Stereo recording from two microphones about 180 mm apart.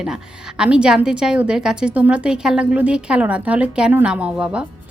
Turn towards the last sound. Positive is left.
turn(degrees=-5)  # may be behind; listen again after turning